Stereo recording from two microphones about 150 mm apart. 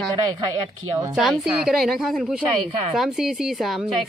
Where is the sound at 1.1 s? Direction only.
5° right (ahead or behind).